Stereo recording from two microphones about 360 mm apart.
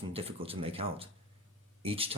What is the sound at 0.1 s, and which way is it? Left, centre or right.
Speech, centre.